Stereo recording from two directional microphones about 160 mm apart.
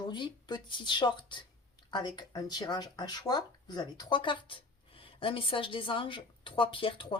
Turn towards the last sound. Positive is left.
turn(degrees=30)  # may be behind; listen again after turning